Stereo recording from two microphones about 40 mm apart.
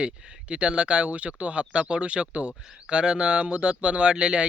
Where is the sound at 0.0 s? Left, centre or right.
Right.